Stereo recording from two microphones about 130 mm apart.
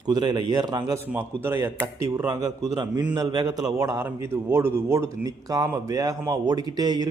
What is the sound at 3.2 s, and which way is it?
A man's voice, 30° right (ahead or behind).